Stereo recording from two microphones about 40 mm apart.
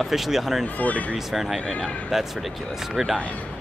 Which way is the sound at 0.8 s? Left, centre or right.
Left.